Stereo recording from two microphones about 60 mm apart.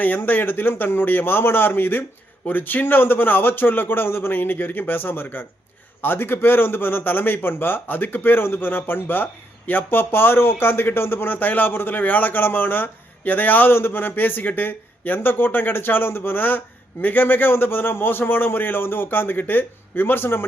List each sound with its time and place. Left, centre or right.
0.0 s a man's voice: left